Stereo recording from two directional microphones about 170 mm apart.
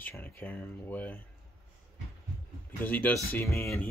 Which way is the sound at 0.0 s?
10° left (ahead or behind).